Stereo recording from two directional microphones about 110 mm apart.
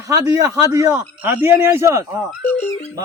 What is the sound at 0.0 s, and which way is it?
A man's voice, 30° right (ahead or behind).